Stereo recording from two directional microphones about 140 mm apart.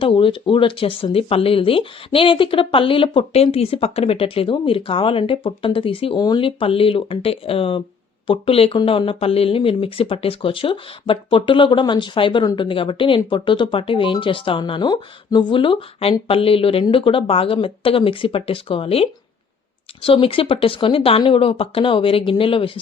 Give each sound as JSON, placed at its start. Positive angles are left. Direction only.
{"t": 0.0, "sound": "speech", "side_deg": 40}